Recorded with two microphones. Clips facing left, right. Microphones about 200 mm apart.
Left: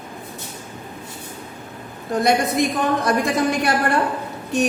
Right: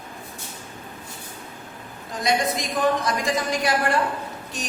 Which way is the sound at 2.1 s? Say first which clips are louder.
Left 5 dB; 60° left (ahead or behind).